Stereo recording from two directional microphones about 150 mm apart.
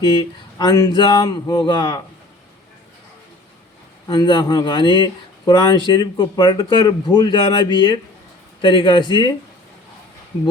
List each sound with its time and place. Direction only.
0.6 s speech: 30° left (ahead or behind)
4.0 s a man's voice: 25° left (ahead or behind)